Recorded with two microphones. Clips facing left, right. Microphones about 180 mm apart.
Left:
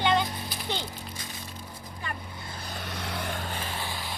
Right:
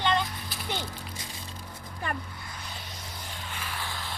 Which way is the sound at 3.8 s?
15° left (ahead or behind).